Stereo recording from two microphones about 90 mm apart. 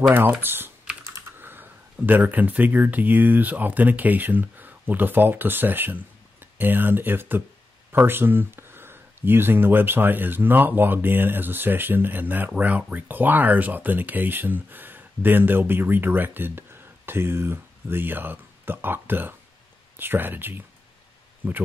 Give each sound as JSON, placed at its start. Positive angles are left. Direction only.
{"t": 0.1, "sound": "speech", "side_deg": -25}